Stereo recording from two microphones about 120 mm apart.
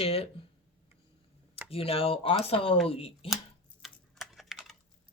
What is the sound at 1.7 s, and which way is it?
Speech, 50° left (ahead or behind).